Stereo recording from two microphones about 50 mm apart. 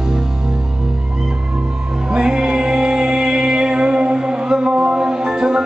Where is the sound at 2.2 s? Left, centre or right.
Centre.